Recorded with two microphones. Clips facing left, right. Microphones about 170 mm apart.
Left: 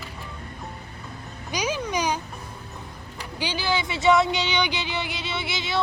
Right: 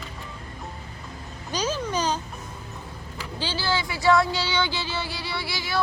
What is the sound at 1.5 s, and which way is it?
Meow, 10° left (ahead or behind).